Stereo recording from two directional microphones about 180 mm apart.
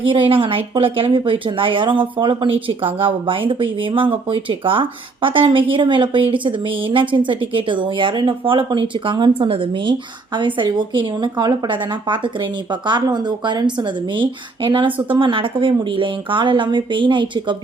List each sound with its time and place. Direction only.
0.0 s speech: 30° right (ahead or behind)